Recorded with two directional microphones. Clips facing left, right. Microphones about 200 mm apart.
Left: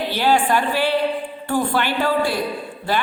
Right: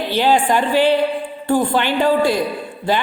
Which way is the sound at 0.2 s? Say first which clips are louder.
Right 3 dB; 15° right (ahead or behind).